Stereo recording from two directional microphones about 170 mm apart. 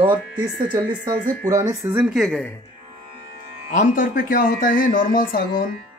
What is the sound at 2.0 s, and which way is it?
Speech, centre (ahead or behind).